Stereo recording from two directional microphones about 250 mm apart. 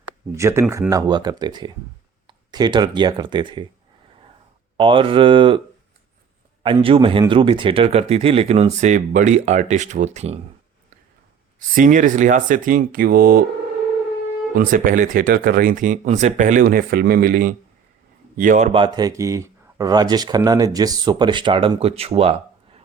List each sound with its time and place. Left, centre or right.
0.3 s speech: centre
4.8 s speech: right
6.6 s speech: right
11.7 s speech: right
14.5 s speech: right